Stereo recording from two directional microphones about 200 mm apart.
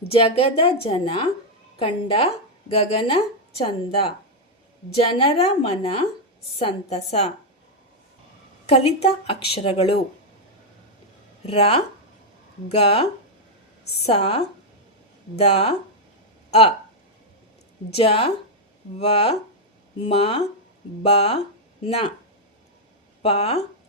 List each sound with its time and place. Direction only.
0.1 s a woman's voice: 30° left (ahead or behind)
5.1 s a woman's voice: 30° left (ahead or behind)
8.6 s a woman's voice: 30° left (ahead or behind)
11.4 s a woman's voice: 30° left (ahead or behind)
15.4 s a woman's voice: 30° left (ahead or behind)
17.9 s a woman's voice: 30° left (ahead or behind)
23.2 s a woman's voice: 30° left (ahead or behind)